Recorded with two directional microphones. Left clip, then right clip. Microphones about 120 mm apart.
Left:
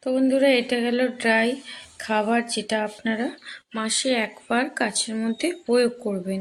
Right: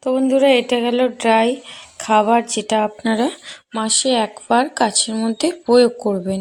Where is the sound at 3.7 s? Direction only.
30° right (ahead or behind).